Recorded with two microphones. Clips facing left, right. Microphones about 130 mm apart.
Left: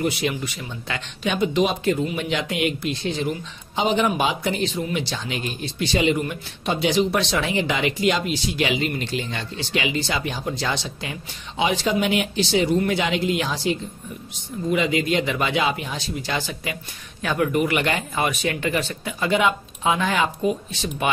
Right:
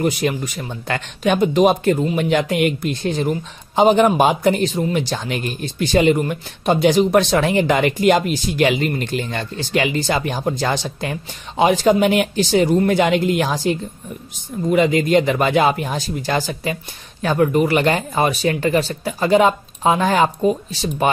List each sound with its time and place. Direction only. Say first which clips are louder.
0.0 s speech: right 4 dB; 45° right (ahead or behind)